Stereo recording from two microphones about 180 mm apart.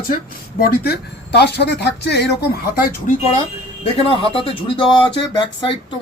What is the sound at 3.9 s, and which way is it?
Speech, 30° left (ahead or behind).